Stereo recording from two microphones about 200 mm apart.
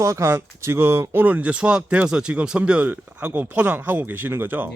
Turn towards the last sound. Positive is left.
turn(degrees=-10)  # may be behind; listen again after turning